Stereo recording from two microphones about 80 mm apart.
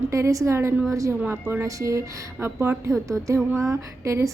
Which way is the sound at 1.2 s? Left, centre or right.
Right.